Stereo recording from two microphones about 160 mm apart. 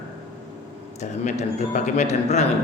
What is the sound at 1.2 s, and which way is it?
A man's voice, 50° left (ahead or behind).